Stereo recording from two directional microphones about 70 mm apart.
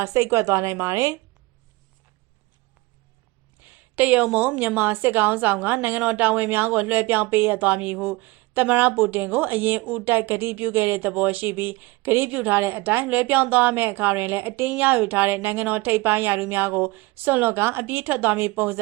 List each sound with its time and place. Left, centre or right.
0.0 s a woman's voice: right
3.9 s speech: centre